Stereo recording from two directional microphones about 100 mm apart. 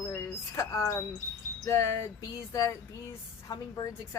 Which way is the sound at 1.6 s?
25° left (ahead or behind).